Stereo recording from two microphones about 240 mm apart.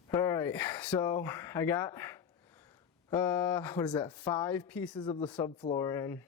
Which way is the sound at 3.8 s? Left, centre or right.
Centre.